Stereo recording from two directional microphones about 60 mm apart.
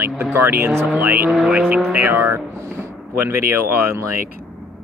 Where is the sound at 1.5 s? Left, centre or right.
Centre.